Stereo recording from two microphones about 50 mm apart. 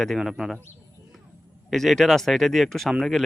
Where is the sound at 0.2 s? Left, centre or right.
Centre.